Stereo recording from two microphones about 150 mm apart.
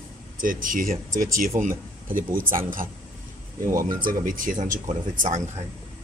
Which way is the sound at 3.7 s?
70° right (ahead or behind).